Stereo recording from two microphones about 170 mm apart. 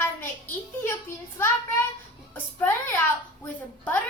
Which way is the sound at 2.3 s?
10° left (ahead or behind).